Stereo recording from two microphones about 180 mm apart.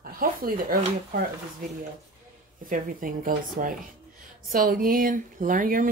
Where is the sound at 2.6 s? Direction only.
50° right (ahead or behind).